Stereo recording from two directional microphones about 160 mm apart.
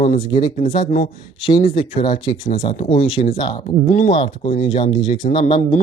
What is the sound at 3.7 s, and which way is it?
Speech, 55° left (ahead or behind).